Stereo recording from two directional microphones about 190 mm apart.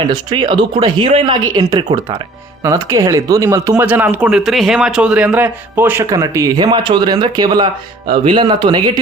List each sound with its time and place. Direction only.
0.1 s speech: 25° right (ahead or behind)